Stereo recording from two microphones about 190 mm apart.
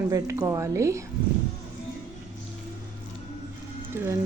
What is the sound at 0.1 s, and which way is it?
Speech, 15° right (ahead or behind).